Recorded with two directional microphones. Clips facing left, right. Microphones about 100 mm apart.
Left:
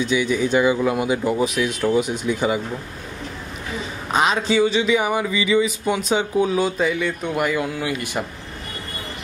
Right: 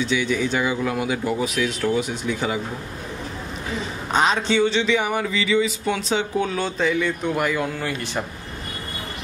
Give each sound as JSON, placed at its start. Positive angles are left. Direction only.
{"t": 0.0, "sound": "speech", "side_deg": 15}
{"t": 4.1, "sound": "speech", "side_deg": 5}